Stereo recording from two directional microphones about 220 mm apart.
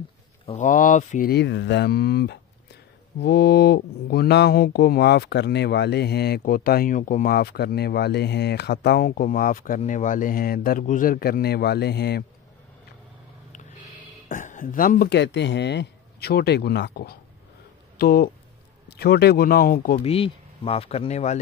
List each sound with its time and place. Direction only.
0.5 s speech: 35° left (ahead or behind)
14.3 s speech: 35° left (ahead or behind)
20.0 s speech: 25° left (ahead or behind)